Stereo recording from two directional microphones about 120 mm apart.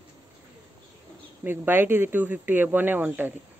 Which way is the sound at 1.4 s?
15° right (ahead or behind).